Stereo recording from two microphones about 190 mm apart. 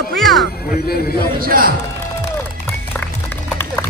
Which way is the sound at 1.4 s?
50° right (ahead or behind).